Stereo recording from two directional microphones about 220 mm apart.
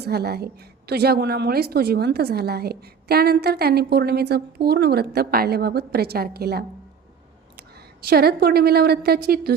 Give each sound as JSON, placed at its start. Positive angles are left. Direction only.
{"t": 0.0, "sound": "a woman's voice", "side_deg": -45}
{"t": 7.7, "sound": "a woman's voice", "side_deg": -45}